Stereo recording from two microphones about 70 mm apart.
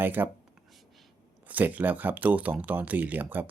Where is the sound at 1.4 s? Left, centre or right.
Right.